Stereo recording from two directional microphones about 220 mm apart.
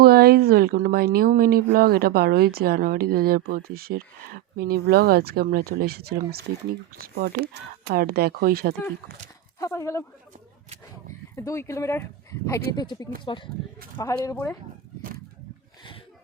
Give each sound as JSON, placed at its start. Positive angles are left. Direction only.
{"t": 0.0, "sound": "speech", "side_deg": -45}
{"t": 9.6, "sound": "speech", "side_deg": 15}
{"t": 11.3, "sound": "speech", "side_deg": 10}
{"t": 15.8, "sound": "a sound", "side_deg": 25}